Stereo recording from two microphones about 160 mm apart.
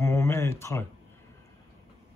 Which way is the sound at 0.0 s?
15° left (ahead or behind).